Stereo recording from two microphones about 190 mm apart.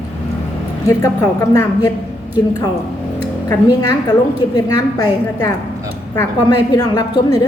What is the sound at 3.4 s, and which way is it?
A woman's voice, 20° left (ahead or behind).